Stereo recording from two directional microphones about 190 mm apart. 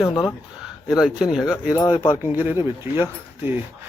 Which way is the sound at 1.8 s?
25° left (ahead or behind).